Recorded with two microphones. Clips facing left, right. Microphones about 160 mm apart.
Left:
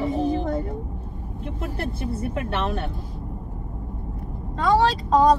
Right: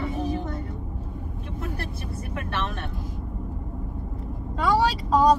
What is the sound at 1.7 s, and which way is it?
Speech, 25° left (ahead or behind).